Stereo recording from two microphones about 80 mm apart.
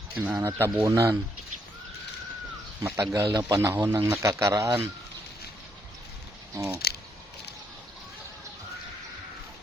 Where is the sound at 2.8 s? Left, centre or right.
Right.